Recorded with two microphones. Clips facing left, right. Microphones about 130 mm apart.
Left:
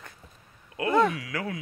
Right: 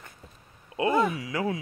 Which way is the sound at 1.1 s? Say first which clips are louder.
Right 4 dB; 25° right (ahead or behind).